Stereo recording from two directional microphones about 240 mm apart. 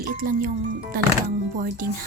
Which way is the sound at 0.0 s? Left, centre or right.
Right.